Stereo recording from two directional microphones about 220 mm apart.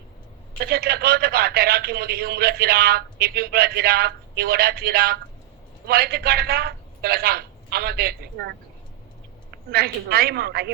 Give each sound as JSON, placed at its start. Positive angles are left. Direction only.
{"t": 0.6, "sound": "a man's voice", "side_deg": -45}